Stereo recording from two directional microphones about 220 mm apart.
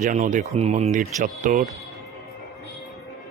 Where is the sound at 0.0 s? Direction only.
35° right (ahead or behind).